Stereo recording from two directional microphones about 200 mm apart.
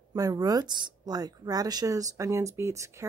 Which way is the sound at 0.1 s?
15° right (ahead or behind).